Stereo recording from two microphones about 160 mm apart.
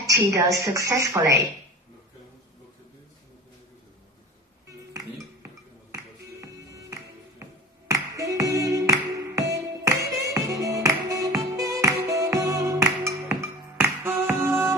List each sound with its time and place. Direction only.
0.0 s speech: 20° right (ahead or behind)
4.9 s music: 20° right (ahead or behind)